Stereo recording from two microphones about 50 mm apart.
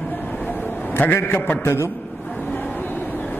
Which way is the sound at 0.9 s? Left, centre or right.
Left.